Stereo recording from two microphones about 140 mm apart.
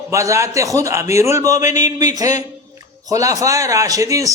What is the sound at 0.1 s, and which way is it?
A man's voice, 20° right (ahead or behind).